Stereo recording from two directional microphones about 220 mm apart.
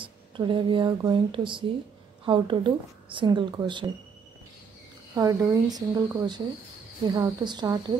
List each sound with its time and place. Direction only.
0.0 s speech: 20° right (ahead or behind)
5.1 s speech: 15° right (ahead or behind)